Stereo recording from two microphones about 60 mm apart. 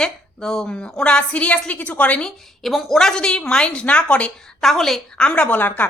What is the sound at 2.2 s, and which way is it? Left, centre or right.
A woman's voice, centre.